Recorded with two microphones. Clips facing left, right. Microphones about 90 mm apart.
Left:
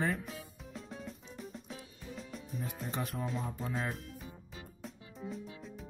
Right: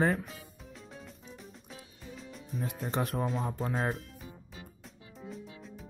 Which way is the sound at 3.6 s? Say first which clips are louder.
Right 5 dB; 45° right (ahead or behind).